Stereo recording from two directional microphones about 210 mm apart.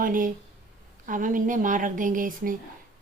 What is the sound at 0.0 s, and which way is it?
A woman's voice, 40° right (ahead or behind).